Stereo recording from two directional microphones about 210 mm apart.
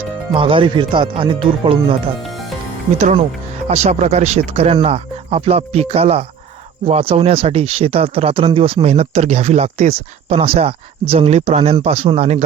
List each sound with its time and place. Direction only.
0.3 s speech: 25° right (ahead or behind)
3.0 s speech: 35° right (ahead or behind)